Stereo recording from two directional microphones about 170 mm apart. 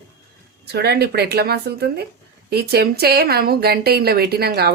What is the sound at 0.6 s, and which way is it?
A woman's voice, 75° right (ahead or behind).